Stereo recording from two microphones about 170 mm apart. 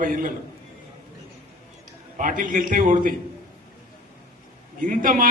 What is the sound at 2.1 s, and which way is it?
A man's voice, 50° right (ahead or behind).